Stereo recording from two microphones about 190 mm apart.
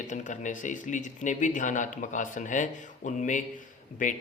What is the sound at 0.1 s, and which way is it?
Speech, 40° left (ahead or behind).